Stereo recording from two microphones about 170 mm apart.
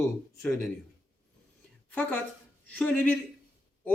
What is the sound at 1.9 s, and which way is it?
A man's voice, 10° left (ahead or behind).